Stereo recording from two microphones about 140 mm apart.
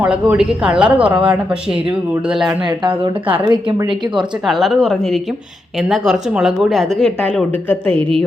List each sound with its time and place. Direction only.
0.0 s speech: 10° right (ahead or behind)
2.5 s speech: 35° right (ahead or behind)
4.4 s a woman's voice: centre (ahead or behind)
7.9 s speech: 40° right (ahead or behind)